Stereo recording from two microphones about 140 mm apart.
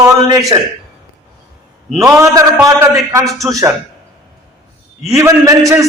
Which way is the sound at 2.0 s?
20° right (ahead or behind).